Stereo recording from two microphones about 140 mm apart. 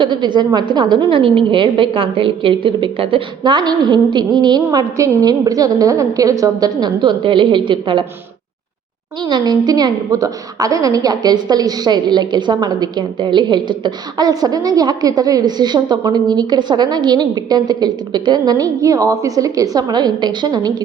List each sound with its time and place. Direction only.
0.0 s a woman's voice: 35° right (ahead or behind)
9.2 s a woman's voice: 30° right (ahead or behind)